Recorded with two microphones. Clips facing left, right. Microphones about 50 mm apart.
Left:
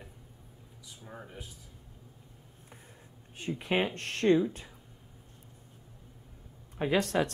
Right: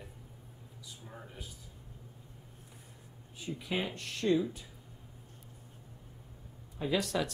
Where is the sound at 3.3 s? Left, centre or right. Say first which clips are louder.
Left 6 dB; left.